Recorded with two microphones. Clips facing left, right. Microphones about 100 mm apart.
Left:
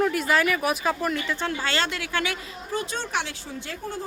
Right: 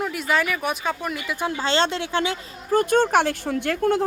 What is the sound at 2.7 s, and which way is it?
Speech, 55° right (ahead or behind).